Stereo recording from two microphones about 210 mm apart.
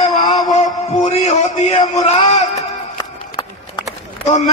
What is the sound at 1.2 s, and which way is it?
A man's voice, 30° left (ahead or behind).